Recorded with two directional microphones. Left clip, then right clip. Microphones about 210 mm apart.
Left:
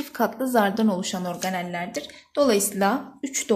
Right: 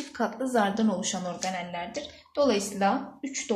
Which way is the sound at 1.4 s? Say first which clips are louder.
Left 6 dB; 45° left (ahead or behind).